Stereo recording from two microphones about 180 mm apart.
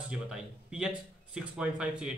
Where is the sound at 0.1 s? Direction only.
5° right (ahead or behind).